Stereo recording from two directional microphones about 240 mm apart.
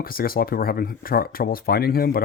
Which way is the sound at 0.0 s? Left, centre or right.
Left.